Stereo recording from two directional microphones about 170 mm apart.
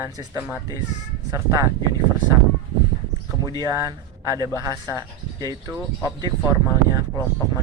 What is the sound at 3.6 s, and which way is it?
Speech, 20° right (ahead or behind).